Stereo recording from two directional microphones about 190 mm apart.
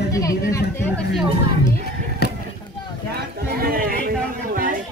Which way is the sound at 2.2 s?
60° left (ahead or behind).